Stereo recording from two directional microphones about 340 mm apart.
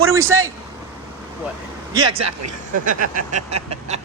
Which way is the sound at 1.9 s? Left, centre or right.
Centre.